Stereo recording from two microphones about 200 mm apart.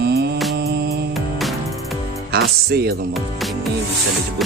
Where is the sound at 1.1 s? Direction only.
Centre (ahead or behind).